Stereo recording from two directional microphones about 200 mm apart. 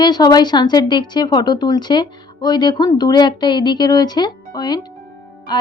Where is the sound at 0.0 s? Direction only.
20° left (ahead or behind).